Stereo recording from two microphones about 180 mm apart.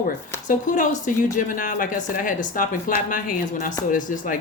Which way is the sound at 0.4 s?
45° left (ahead or behind).